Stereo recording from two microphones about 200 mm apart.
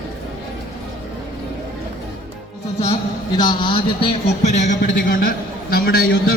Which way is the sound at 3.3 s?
20° left (ahead or behind).